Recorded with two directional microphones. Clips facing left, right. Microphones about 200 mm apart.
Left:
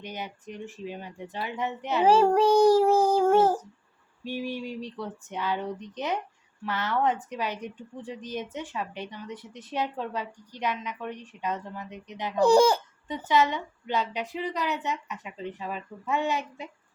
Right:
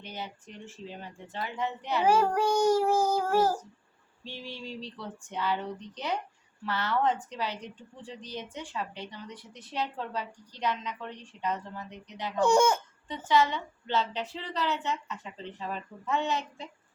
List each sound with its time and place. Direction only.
0.0 s speech: 15° left (ahead or behind)
2.0 s child singing: 30° left (ahead or behind)
4.2 s speech: 15° left (ahead or behind)
12.4 s child singing: 35° left (ahead or behind)
13.1 s speech: 20° left (ahead or behind)